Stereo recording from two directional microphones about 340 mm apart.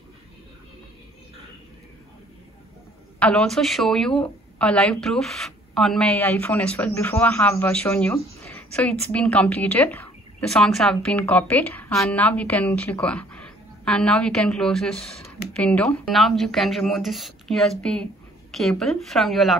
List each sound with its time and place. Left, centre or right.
3.2 s a woman's voice: centre